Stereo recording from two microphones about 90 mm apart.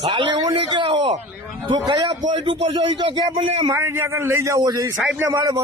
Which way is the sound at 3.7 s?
25° right (ahead or behind).